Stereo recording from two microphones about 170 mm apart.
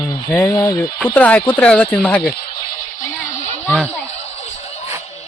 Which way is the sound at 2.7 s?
50° left (ahead or behind).